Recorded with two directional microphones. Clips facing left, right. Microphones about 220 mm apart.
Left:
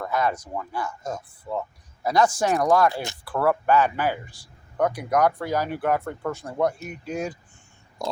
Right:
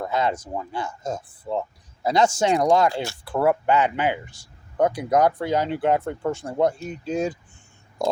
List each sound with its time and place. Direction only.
0.0 s speech: 25° right (ahead or behind)